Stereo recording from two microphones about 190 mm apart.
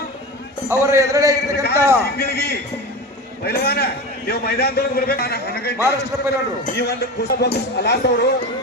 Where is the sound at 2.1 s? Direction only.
55° left (ahead or behind).